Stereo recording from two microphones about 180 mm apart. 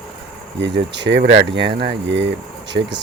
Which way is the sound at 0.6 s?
75° right (ahead or behind).